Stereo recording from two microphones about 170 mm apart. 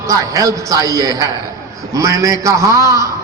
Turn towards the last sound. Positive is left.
turn(degrees=-20)  # may be behind; listen again after turning